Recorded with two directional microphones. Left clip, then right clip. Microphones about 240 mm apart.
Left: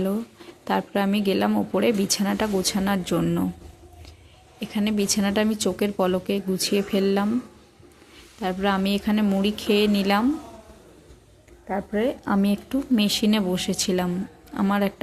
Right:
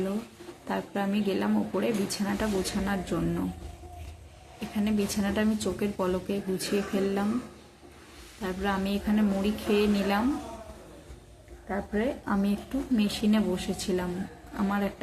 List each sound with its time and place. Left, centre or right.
0.7 s speech: left
4.7 s speech: left
8.4 s speech: left
11.7 s speech: left